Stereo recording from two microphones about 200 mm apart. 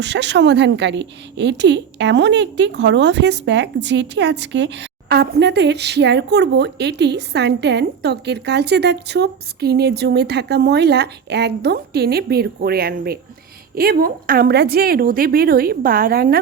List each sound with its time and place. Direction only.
0.0 s a woman's voice: 60° right (ahead or behind)